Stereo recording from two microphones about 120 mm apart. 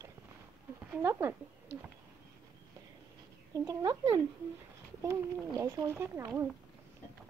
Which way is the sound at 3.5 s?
25° right (ahead or behind).